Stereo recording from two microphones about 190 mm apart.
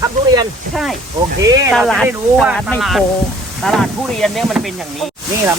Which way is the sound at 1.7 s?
Centre (ahead or behind).